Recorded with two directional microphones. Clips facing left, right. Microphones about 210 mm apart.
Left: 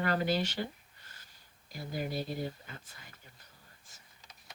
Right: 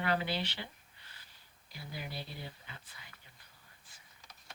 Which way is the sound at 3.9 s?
45° left (ahead or behind).